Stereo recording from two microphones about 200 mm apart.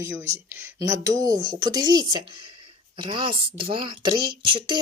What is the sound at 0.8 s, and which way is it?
Speech, 15° right (ahead or behind).